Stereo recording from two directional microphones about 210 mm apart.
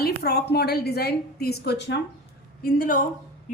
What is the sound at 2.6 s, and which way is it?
Speech, 45° left (ahead or behind).